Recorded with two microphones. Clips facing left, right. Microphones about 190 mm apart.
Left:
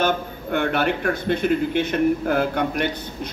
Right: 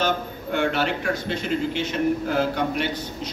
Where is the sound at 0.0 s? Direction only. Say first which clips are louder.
Left 2 dB; 55° left (ahead or behind).